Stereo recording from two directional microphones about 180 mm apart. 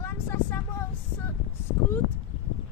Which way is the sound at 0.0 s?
10° left (ahead or behind).